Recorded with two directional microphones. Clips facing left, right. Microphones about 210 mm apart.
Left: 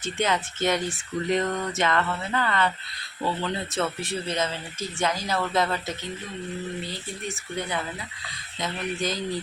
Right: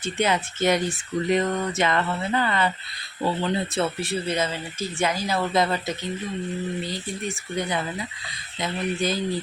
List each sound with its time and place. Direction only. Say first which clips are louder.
0.0 s speech: right 2 dB; 10° right (ahead or behind)
7.5 s speech: right 3 dB; 15° right (ahead or behind)